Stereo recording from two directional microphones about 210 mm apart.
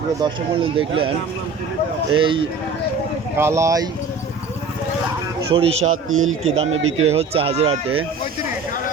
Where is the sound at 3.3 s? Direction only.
10° right (ahead or behind).